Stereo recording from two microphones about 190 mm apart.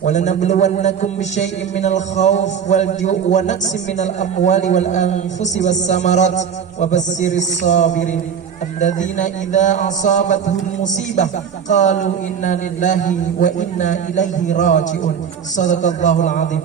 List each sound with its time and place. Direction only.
0.0 s a man's voice: 40° left (ahead or behind)
11.7 s a man's voice: 40° left (ahead or behind)